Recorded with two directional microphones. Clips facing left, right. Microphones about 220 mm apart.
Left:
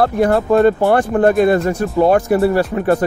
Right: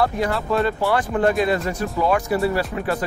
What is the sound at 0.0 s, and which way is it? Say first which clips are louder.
Speech: left 7 dB; 50° left (ahead or behind).